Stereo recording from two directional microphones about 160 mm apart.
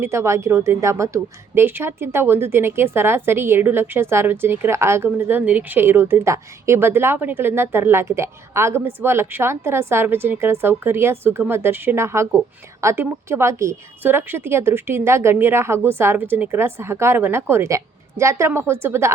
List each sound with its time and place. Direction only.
0.0 s a woman's voice: 15° right (ahead or behind)